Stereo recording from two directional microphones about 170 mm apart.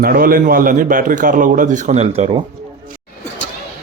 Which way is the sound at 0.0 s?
60° right (ahead or behind).